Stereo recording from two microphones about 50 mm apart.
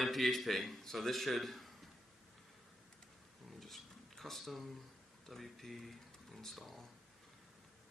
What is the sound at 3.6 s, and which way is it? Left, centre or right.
Dishes, centre.